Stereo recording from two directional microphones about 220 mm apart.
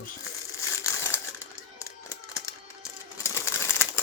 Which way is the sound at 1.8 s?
15° left (ahead or behind).